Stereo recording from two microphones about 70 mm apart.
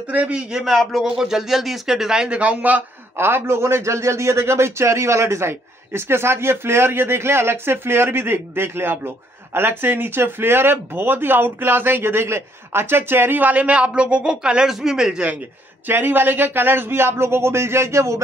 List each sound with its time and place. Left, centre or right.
0.1 s a man's voice: centre
3.2 s a man's voice: right; by 15.3 s centre
15.9 s a man's voice: right